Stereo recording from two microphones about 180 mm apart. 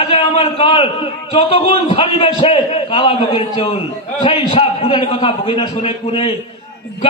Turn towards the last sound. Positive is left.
turn(degrees=30)  # may be behind; listen again after turning